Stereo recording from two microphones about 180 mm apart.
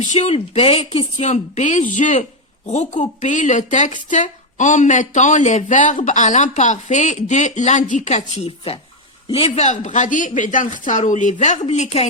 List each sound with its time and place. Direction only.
0.1 s a woman's voice: 35° left (ahead or behind)
8.4 s a woman's voice: 30° left (ahead or behind)